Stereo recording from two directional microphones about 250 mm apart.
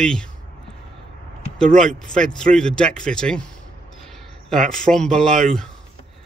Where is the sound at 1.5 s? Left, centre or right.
Centre.